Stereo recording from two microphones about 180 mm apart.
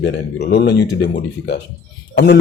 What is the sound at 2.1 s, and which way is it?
Speech, 65° left (ahead or behind).